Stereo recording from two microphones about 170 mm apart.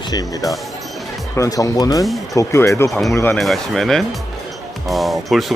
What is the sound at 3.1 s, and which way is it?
Speech, 10° left (ahead or behind).